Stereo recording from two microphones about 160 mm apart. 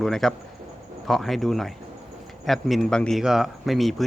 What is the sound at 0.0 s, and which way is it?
Speech, centre (ahead or behind).